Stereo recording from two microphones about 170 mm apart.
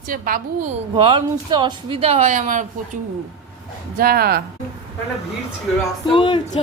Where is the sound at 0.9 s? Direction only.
30° right (ahead or behind); by 3.0 s 45° right (ahead or behind).